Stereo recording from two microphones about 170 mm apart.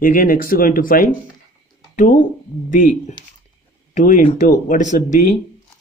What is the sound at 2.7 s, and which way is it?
Speech, 50° left (ahead or behind).